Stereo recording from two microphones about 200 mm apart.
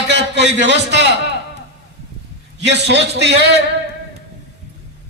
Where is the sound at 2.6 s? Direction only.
60° right (ahead or behind).